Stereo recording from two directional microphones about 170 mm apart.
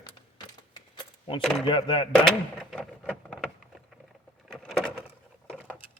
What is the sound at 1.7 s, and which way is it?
Speech, 30° left (ahead or behind).